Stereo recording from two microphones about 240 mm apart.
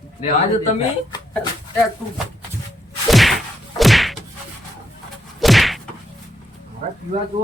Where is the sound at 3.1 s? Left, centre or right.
Centre.